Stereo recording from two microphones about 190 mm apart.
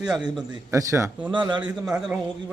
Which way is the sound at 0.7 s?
15° right (ahead or behind).